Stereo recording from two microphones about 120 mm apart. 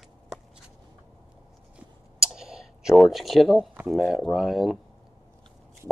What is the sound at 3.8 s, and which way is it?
Speech, centre (ahead or behind).